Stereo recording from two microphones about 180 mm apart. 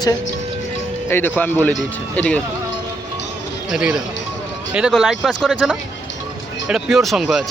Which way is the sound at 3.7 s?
5° right (ahead or behind).